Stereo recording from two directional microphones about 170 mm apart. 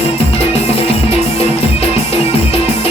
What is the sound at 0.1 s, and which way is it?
Music, 35° left (ahead or behind).